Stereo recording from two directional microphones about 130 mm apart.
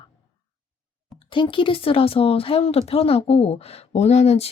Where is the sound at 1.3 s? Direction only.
40° left (ahead or behind).